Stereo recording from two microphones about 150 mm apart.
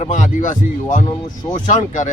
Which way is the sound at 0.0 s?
55° left (ahead or behind).